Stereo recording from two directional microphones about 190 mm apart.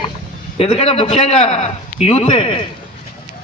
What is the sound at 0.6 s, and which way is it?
A man's voice, 30° left (ahead or behind).